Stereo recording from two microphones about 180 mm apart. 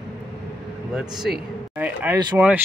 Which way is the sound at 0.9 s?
5° right (ahead or behind).